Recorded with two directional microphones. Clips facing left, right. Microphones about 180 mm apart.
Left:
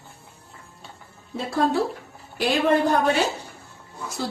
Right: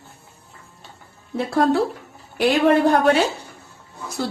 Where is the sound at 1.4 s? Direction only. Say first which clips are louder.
Right 4 dB; 65° right (ahead or behind).